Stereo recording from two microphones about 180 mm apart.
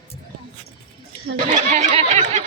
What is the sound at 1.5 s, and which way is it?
Snicker, 40° right (ahead or behind).